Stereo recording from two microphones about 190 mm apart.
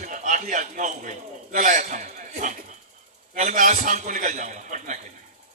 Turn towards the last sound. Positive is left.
turn(degrees=-40)  # may be behind; listen again after turning